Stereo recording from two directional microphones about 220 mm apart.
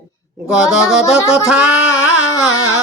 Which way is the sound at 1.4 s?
5° right (ahead or behind).